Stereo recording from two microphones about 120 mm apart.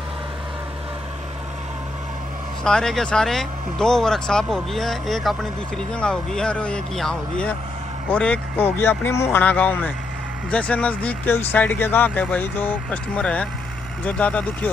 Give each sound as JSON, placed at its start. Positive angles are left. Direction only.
{"t": 2.6, "sound": "speech", "side_deg": 5}